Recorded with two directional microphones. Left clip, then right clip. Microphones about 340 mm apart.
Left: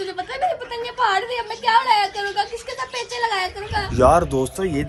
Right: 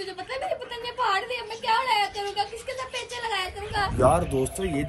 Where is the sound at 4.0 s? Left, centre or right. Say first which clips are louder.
Left 7 dB; left.